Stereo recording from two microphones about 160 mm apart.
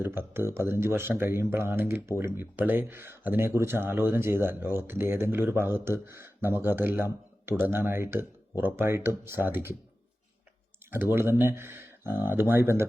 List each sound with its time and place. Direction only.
0.0 s speech: 15° right (ahead or behind)
10.9 s speech: 15° right (ahead or behind)